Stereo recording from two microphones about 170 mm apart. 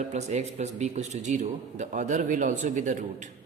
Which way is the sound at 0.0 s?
40° right (ahead or behind).